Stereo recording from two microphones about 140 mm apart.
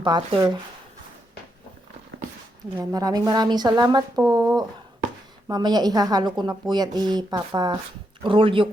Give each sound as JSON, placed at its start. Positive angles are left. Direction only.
{"t": 0.0, "sound": "speech", "side_deg": -30}
{"t": 2.9, "sound": "a woman's voice", "side_deg": -25}